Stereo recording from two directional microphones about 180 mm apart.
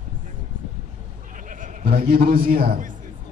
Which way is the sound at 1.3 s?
45° right (ahead or behind).